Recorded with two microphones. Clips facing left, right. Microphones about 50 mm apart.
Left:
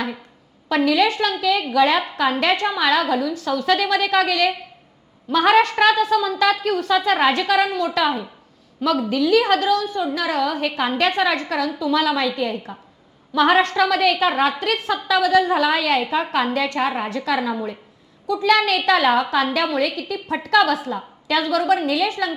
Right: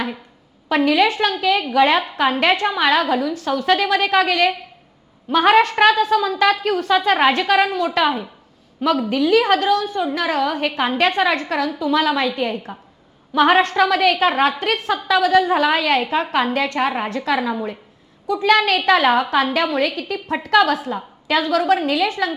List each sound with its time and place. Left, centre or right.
0.7 s a woman's voice: right